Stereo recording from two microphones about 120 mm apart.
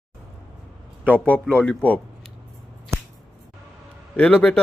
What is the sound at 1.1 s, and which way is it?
Speech, 10° left (ahead or behind).